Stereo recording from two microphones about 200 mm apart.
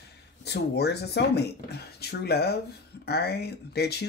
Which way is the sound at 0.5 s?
55° left (ahead or behind).